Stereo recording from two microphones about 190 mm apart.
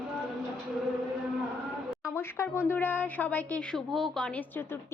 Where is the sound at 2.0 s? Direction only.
15° left (ahead or behind).